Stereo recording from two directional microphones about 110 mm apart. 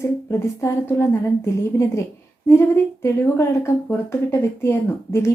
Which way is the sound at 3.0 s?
25° left (ahead or behind).